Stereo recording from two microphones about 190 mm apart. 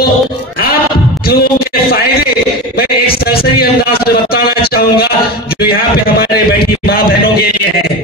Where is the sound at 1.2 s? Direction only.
55° left (ahead or behind).